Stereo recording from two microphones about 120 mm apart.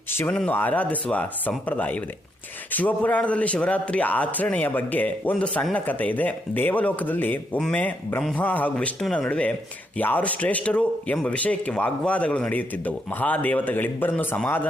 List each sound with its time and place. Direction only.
0.1 s a man's voice: 20° left (ahead or behind)